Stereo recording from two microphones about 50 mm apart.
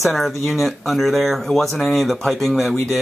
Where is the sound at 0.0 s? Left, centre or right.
Centre.